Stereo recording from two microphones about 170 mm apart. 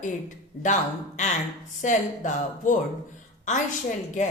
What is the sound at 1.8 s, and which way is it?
Speech, 50° left (ahead or behind).